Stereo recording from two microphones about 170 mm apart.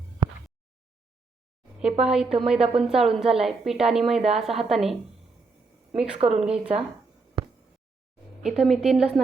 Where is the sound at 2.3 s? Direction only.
Centre (ahead or behind).